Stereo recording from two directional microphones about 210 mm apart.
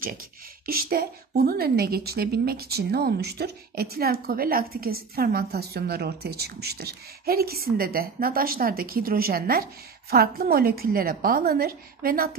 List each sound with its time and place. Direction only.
0.7 s a woman's voice: 45° right (ahead or behind)